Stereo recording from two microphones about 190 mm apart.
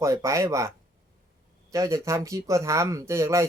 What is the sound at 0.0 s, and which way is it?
Speech, 15° right (ahead or behind).